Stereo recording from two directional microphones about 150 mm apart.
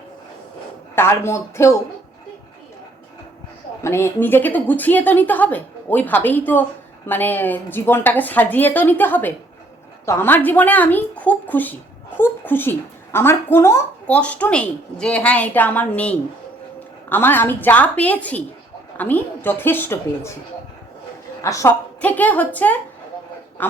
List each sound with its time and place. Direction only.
0.9 s a woman's voice: 15° left (ahead or behind)
3.8 s a woman's voice: 15° left (ahead or behind)
21.4 s a woman's voice: 20° left (ahead or behind)